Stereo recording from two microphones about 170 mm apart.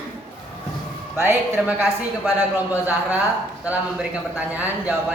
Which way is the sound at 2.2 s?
10° right (ahead or behind).